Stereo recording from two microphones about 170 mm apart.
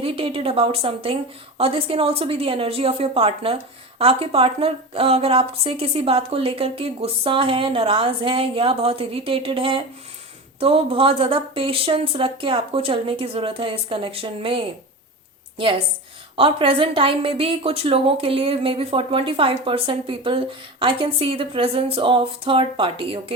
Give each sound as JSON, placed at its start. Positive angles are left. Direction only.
{"t": 0.0, "sound": "a woman's voice", "side_deg": -30}
{"t": 16.3, "sound": "a woman's voice", "side_deg": -30}